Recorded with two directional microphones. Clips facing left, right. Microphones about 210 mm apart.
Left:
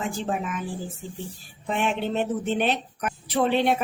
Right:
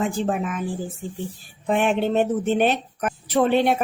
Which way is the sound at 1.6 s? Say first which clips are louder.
Right 5 dB; 50° right (ahead or behind).